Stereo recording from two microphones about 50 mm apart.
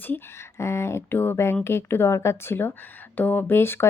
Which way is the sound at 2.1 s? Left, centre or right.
Left.